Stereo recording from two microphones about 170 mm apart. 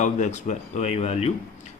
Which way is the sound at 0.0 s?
45° left (ahead or behind).